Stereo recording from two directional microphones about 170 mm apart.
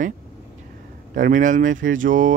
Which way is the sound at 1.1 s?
50° right (ahead or behind).